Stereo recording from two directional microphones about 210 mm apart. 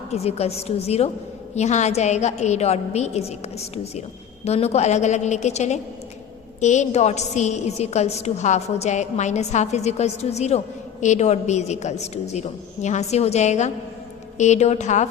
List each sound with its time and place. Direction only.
0.1 s a woman's voice: 30° left (ahead or behind)
4.4 s a woman's voice: 30° left (ahead or behind)